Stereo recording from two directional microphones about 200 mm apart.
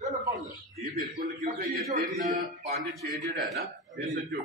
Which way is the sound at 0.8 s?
45° right (ahead or behind).